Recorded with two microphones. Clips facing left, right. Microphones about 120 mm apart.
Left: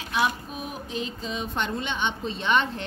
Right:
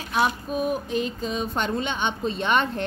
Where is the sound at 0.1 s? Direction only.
45° right (ahead or behind).